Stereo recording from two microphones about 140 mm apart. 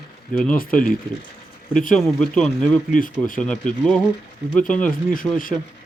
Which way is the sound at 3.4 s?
10° left (ahead or behind).